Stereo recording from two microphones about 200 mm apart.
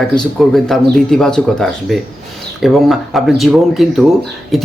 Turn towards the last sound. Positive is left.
turn(degrees=0)  # may be behind; listen again after turning